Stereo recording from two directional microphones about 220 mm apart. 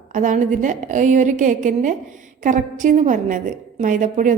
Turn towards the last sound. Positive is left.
turn(degrees=-35)  # may be behind; listen again after turning